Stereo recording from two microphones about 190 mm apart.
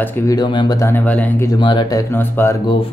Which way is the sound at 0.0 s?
20° left (ahead or behind).